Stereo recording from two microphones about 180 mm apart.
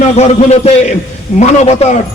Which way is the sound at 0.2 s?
35° left (ahead or behind).